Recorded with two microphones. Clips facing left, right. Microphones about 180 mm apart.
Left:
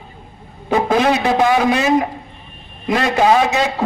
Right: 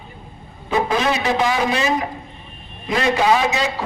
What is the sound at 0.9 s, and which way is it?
A man's voice, 55° left (ahead or behind).